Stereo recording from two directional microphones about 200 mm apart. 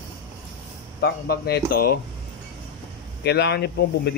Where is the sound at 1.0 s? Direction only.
50° left (ahead or behind).